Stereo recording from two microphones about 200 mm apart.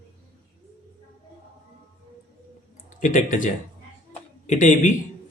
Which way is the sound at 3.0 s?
40° left (ahead or behind).